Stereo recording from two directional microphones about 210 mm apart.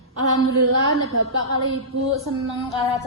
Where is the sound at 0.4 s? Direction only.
90° right.